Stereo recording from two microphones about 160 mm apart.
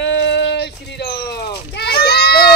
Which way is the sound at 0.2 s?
90° left.